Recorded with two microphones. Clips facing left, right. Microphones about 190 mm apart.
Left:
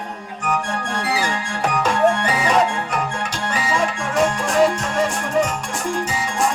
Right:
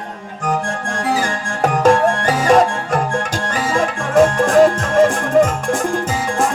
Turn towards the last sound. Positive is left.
turn(degrees=-50)  # may be behind; listen again after turning